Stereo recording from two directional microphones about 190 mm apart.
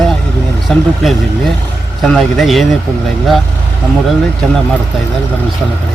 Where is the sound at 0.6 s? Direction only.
Centre (ahead or behind).